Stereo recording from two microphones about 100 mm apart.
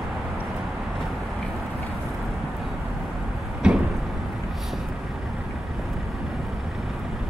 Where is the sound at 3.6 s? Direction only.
10° right (ahead or behind).